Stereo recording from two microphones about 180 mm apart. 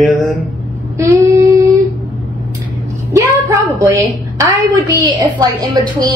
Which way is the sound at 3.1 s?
20° right (ahead or behind).